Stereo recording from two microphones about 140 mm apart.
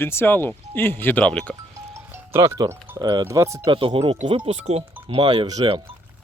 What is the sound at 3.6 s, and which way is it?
Speech, 40° right (ahead or behind).